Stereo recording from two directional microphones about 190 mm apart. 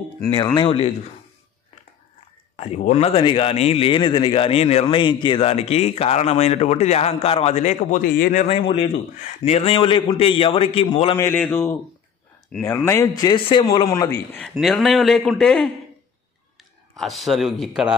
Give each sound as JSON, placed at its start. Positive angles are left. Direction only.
{"t": 0.6, "sound": "speech", "side_deg": 30}
{"t": 2.5, "sound": "speech", "side_deg": 30}
{"t": 8.5, "sound": "a man's voice", "side_deg": 30}
{"t": 11.1, "sound": "speech", "side_deg": 10}
{"t": 14.5, "sound": "a man's voice", "side_deg": 0}
{"t": 16.9, "sound": "a man's voice", "side_deg": 0}